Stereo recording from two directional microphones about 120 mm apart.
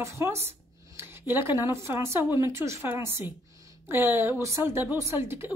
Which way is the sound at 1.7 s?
20° right (ahead or behind).